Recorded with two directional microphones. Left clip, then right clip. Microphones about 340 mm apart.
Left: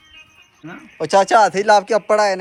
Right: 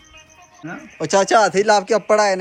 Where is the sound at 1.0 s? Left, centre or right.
Centre.